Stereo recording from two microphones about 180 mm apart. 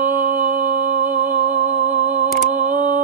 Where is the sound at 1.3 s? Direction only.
45° right (ahead or behind).